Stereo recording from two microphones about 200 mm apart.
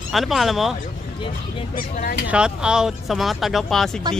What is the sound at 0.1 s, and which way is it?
Speech, centre (ahead or behind).